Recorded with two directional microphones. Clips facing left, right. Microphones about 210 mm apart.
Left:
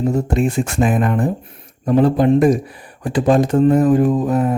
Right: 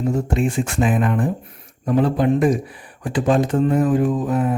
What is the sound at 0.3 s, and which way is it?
Speech, 40° left (ahead or behind).